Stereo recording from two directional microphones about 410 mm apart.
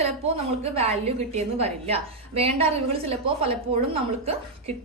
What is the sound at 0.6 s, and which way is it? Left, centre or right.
A woman's voice, centre.